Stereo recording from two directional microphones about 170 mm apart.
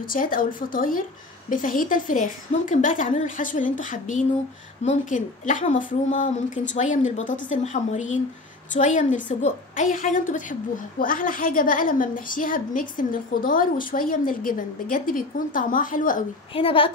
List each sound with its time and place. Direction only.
0.0 s a woman's voice: 55° left (ahead or behind)
16.5 s a woman's voice: 30° left (ahead or behind)